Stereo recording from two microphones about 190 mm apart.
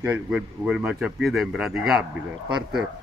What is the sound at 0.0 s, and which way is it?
Speech, 5° right (ahead or behind).